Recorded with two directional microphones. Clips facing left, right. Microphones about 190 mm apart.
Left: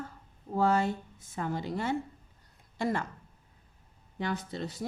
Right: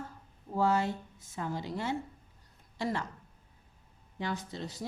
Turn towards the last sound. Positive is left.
turn(degrees=55)  # may be behind; listen again after turning